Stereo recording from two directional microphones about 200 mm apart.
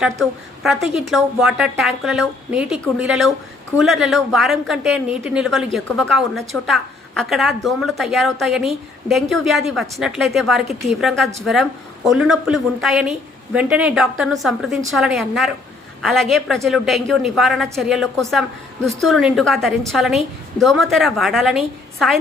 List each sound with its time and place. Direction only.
0.0 s a woman's voice: centre (ahead or behind)